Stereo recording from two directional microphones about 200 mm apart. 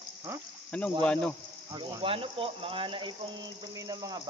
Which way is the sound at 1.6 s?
20° right (ahead or behind).